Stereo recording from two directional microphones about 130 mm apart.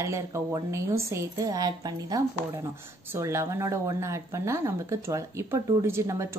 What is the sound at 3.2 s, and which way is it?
Speech, 20° right (ahead or behind).